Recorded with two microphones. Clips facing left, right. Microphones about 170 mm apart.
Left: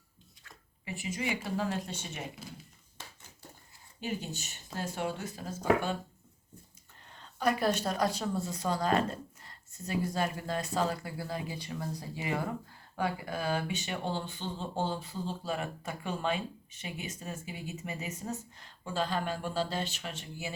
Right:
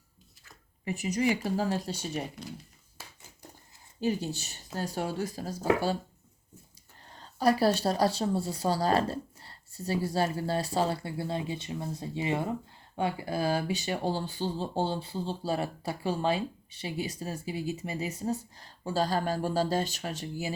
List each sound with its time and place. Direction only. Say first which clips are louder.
0.9 s speech: right 7 dB; 40° right (ahead or behind)
3.0 s a sound: even; 5° right (ahead or behind)
4.0 s speech: right 7 dB; 35° right (ahead or behind)
7.1 s speech: right 5 dB; 35° right (ahead or behind)